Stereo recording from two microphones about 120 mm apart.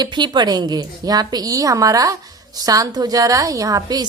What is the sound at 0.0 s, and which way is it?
A woman's voice, 40° right (ahead or behind).